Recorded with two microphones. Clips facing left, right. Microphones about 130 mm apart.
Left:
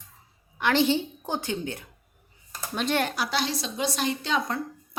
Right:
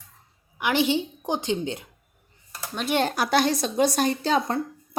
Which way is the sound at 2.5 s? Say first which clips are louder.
Left 1 dB; 5° right (ahead or behind).